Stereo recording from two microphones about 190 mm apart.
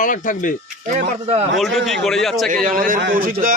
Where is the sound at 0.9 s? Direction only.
35° right (ahead or behind).